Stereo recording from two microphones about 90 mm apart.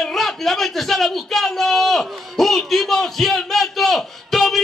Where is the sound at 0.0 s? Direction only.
5° left (ahead or behind).